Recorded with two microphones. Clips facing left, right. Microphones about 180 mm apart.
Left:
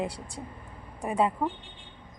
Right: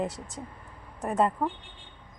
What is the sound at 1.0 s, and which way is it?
Speech, 10° left (ahead or behind).